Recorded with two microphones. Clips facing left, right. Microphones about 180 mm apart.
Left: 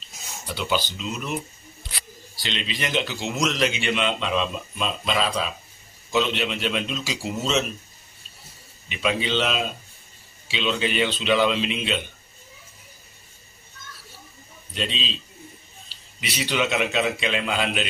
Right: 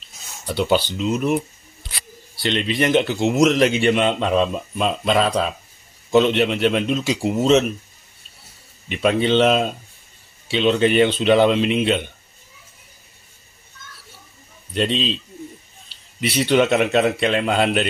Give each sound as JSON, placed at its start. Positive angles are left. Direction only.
{"t": 0.6, "sound": "a man's voice", "side_deg": -60}
{"t": 2.3, "sound": "a man's voice", "side_deg": -60}
{"t": 8.8, "sound": "a man's voice", "side_deg": -55}
{"t": 14.7, "sound": "a man's voice", "side_deg": -60}
{"t": 16.2, "sound": "a man's voice", "side_deg": -55}